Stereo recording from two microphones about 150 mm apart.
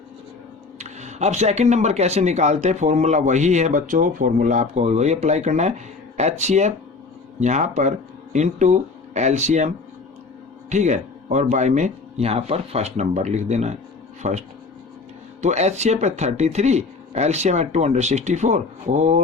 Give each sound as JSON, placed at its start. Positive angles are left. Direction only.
{"t": 0.8, "sound": "speech", "side_deg": -50}
{"t": 10.7, "sound": "speech", "side_deg": -50}